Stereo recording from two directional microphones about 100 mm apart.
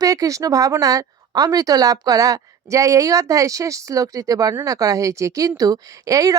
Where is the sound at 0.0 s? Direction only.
35° right (ahead or behind).